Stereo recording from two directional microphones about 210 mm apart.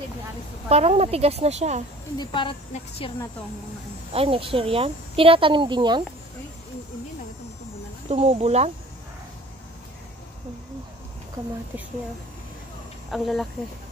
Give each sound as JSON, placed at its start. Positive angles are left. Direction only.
{"t": 0.7, "sound": "speech", "side_deg": -30}
{"t": 2.1, "sound": "speech", "side_deg": 20}
{"t": 4.1, "sound": "speech", "side_deg": -25}
{"t": 8.1, "sound": "speech", "side_deg": -30}
{"t": 13.1, "sound": "speech", "side_deg": 0}